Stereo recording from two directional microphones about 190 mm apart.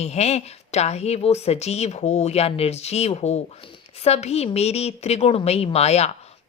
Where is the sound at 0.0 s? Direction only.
35° left (ahead or behind).